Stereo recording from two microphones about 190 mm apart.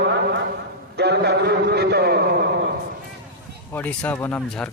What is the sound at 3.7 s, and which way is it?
Speech, 10° left (ahead or behind).